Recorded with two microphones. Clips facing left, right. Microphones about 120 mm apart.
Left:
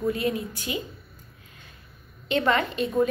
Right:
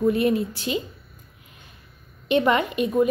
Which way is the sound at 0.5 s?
25° right (ahead or behind).